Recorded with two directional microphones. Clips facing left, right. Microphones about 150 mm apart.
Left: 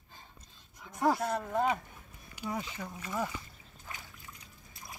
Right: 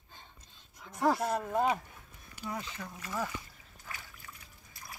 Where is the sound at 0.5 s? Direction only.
Centre (ahead or behind).